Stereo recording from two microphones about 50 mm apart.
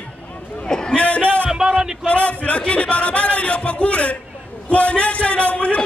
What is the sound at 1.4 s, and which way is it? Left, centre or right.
Speech, centre.